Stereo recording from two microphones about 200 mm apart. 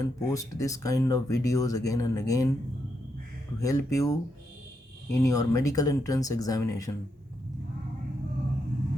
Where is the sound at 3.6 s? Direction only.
15° left (ahead or behind).